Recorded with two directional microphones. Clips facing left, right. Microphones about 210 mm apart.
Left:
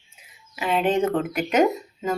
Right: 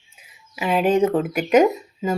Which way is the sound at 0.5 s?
15° right (ahead or behind).